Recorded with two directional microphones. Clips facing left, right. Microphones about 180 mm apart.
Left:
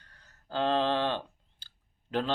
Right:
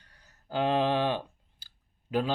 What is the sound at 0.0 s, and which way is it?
Speech, 10° right (ahead or behind).